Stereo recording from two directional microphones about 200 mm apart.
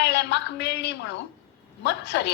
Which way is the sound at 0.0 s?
60° left (ahead or behind).